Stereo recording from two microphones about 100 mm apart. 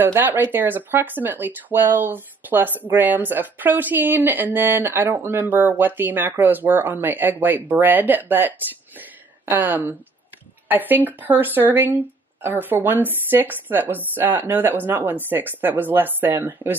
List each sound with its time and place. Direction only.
0.0 s speech: 20° right (ahead or behind)